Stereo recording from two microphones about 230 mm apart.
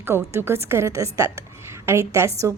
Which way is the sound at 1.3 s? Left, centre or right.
Centre.